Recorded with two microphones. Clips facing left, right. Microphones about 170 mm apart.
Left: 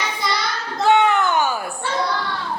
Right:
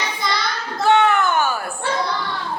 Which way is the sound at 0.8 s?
15° left (ahead or behind).